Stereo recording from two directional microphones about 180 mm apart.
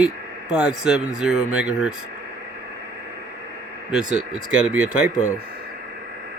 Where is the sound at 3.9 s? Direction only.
5° right (ahead or behind).